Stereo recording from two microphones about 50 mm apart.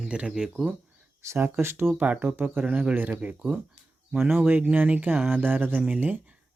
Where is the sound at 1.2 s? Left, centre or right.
Right.